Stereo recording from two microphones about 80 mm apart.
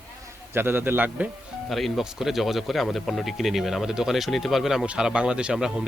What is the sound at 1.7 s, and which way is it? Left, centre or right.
Speech, centre.